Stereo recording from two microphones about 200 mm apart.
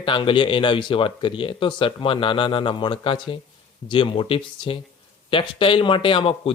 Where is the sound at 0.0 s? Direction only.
25° left (ahead or behind).